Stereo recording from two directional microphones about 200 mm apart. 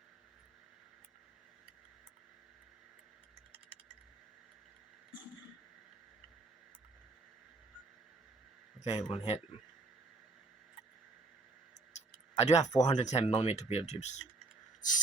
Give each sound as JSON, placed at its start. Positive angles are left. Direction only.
{"t": 8.8, "sound": "speech", "side_deg": 35}
{"t": 12.4, "sound": "speech", "side_deg": 35}
{"t": 12.7, "sound": "speech", "side_deg": 20}
{"t": 13.0, "sound": "speech", "side_deg": 35}